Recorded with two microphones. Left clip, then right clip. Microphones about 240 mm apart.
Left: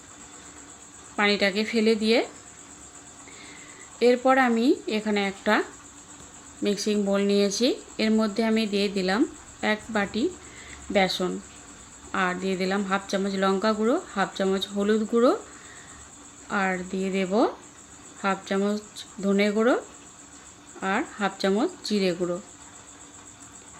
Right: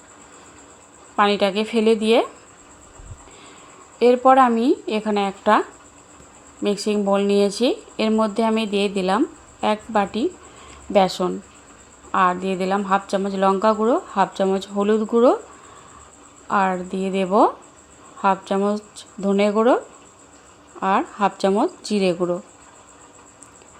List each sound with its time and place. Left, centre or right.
1.1 s a woman's voice: centre
3.9 s a woman's voice: centre
16.5 s a woman's voice: centre
20.8 s a woman's voice: centre